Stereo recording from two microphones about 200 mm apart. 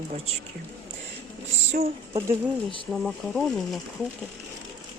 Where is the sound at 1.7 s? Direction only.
30° right (ahead or behind).